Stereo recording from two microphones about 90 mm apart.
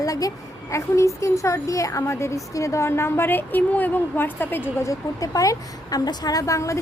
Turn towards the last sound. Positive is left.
turn(degrees=35)  # may be behind; listen again after turning